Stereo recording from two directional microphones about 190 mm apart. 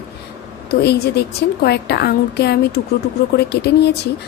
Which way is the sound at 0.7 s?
55° left (ahead or behind).